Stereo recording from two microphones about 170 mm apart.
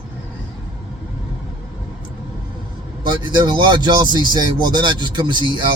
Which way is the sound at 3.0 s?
25° right (ahead or behind).